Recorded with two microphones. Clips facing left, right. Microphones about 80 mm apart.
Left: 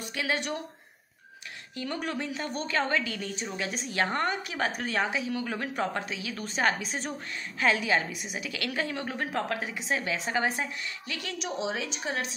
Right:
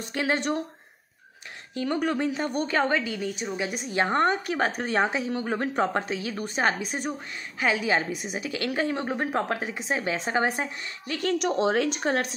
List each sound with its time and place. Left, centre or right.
0.0 s a woman's voice: right
1.8 s a woman's voice: right
6.3 s a woman's voice: right